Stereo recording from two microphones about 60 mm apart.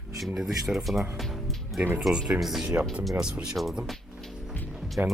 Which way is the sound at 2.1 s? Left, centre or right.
Centre.